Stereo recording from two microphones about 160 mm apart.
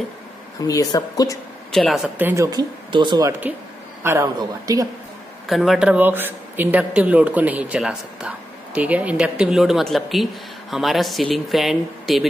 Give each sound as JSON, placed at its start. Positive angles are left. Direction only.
{"t": 0.7, "sound": "a woman's voice", "side_deg": 25}
{"t": 1.7, "sound": "speech", "side_deg": 0}
{"t": 2.1, "sound": "speech", "side_deg": -15}
{"t": 3.3, "sound": "speech", "side_deg": -10}
{"t": 5.5, "sound": "speech", "side_deg": 0}